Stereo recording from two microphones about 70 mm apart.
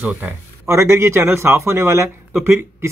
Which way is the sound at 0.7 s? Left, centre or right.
Right.